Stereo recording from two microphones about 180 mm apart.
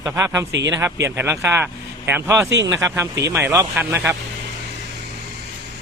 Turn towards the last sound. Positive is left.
turn(degrees=-15)  # may be behind; listen again after turning